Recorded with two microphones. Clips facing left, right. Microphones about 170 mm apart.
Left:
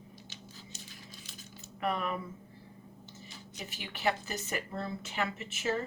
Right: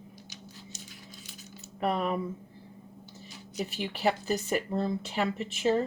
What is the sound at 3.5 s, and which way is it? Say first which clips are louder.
Speech: right 11 dB; 35° right (ahead or behind).